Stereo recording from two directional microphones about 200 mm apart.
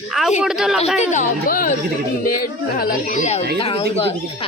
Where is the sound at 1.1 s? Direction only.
40° left (ahead or behind).